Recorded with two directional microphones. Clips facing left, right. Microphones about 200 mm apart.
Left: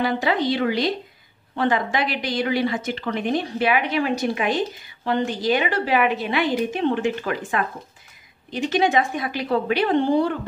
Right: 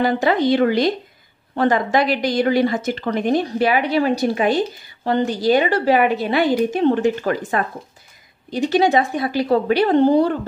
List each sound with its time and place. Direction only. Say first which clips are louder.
0.0 s a woman's voice: right 4 dB; 45° right (ahead or behind)